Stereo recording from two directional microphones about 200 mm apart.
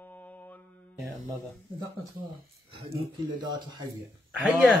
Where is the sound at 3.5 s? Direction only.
20° right (ahead or behind).